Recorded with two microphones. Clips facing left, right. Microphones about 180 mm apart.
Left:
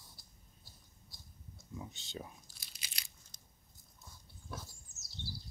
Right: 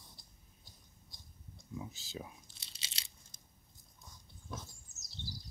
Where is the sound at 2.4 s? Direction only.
25° right (ahead or behind).